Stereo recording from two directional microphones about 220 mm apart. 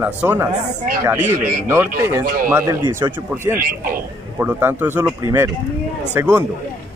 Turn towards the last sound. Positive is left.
turn(degrees=-10)  # may be behind; listen again after turning